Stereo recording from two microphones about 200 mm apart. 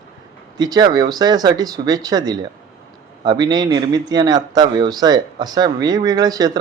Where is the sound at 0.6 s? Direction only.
20° right (ahead or behind).